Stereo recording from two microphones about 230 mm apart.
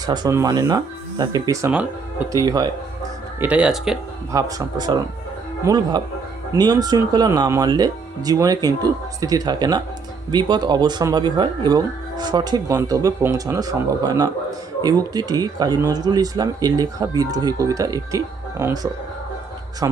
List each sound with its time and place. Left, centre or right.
0.0 s speech: centre
3.4 s speech: centre
4.3 s speech: centre